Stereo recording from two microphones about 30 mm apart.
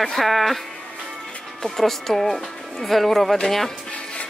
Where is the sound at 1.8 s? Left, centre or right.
Centre.